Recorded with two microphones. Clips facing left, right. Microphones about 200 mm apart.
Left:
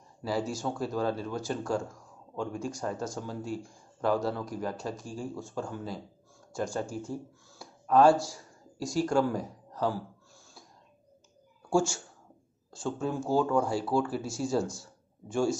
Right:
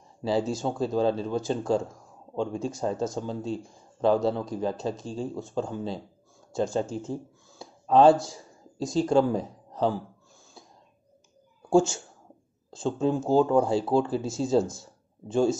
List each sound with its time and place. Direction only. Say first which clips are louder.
0.2 s speech: right 5 dB; 25° right (ahead or behind)
11.7 s speech: right 6 dB; 20° right (ahead or behind)